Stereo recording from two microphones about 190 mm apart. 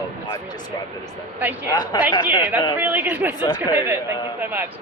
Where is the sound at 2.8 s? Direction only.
10° right (ahead or behind).